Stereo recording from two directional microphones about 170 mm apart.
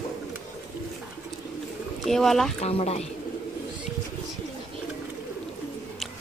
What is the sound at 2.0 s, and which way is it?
Speech, centre (ahead or behind).